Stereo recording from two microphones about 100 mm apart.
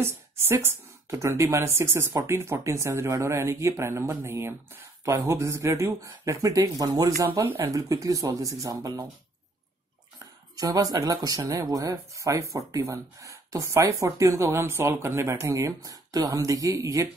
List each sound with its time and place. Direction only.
0.0 s speech: 25° right (ahead or behind)
7.6 s speech: 35° right (ahead or behind)
10.1 s speech: 40° right (ahead or behind)